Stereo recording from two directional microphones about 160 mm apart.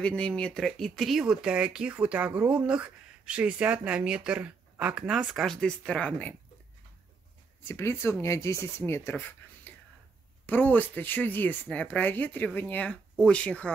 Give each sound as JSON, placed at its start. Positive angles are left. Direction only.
{"t": 0.0, "sound": "speech", "side_deg": 5}
{"t": 7.6, "sound": "speech", "side_deg": 15}
{"t": 9.7, "sound": "whispering", "side_deg": 10}
{"t": 10.4, "sound": "speech", "side_deg": 10}